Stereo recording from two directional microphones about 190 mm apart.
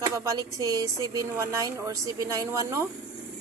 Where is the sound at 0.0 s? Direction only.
15° right (ahead or behind).